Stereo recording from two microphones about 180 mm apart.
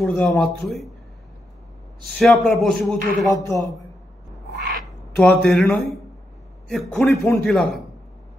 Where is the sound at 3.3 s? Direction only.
20° left (ahead or behind).